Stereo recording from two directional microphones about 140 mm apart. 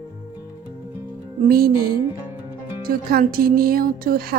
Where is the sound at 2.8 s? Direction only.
90° right.